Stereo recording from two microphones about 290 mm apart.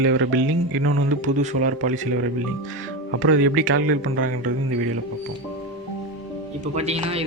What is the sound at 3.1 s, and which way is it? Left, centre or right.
Speech, right.